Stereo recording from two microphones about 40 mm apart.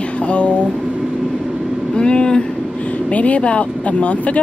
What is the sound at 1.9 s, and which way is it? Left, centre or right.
Speech, left.